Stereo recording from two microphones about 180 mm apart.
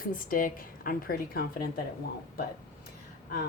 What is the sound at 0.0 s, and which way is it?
A woman's voice, 50° left (ahead or behind).